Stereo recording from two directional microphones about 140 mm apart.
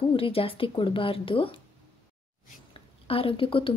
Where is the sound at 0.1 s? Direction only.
40° left (ahead or behind).